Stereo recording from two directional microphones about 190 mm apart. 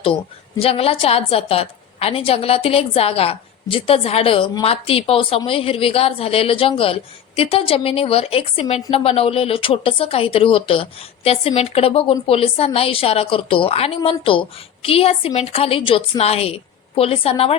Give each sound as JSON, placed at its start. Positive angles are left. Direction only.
{"t": 0.6, "sound": "a woman's voice", "side_deg": 30}